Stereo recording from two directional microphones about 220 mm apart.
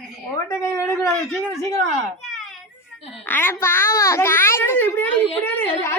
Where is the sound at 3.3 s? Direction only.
10° left (ahead or behind).